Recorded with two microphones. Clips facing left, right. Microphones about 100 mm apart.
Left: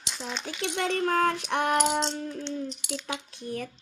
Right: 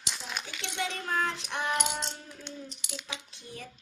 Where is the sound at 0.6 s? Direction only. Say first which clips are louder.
Left 9 dB; 50° left (ahead or behind).